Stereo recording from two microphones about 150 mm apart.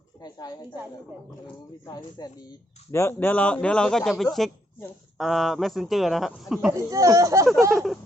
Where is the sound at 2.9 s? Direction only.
15° left (ahead or behind); by 6.7 s centre (ahead or behind).